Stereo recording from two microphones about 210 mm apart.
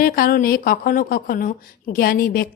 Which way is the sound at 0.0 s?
45° left (ahead or behind).